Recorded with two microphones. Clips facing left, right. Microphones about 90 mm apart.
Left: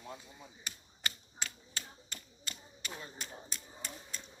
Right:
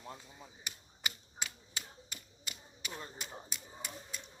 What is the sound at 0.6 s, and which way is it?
Typewriter, 15° right (ahead or behind).